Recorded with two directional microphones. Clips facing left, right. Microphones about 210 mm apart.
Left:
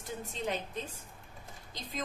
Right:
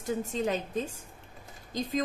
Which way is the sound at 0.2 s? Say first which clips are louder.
Right 6 dB; 45° right (ahead or behind).